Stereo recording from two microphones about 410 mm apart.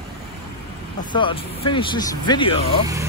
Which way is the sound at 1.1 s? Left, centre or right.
Centre.